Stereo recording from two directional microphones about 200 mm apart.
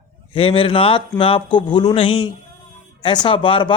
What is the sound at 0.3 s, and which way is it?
A man's voice, 25° left (ahead or behind).